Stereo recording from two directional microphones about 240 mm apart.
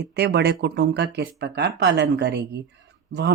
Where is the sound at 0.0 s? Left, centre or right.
Right.